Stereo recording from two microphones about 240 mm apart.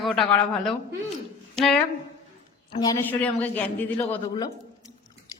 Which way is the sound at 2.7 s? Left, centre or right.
Centre.